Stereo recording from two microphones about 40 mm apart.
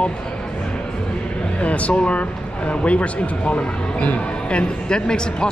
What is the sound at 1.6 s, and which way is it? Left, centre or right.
Speech, left.